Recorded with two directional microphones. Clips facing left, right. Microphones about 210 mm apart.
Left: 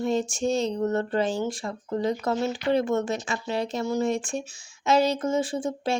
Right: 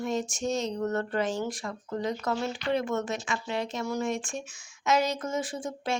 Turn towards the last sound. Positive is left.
turn(degrees=30)  # may be behind; listen again after turning